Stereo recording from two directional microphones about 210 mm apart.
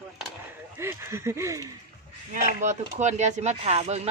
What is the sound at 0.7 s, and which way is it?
Speech, 10° right (ahead or behind).